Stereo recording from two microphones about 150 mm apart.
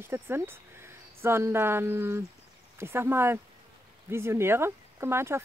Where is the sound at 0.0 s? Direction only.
15° right (ahead or behind).